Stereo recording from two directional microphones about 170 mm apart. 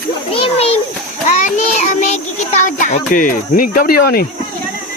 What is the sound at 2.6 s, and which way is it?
Speech, 50° left (ahead or behind).